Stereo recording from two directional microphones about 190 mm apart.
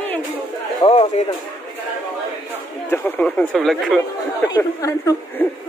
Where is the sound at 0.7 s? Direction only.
30° left (ahead or behind).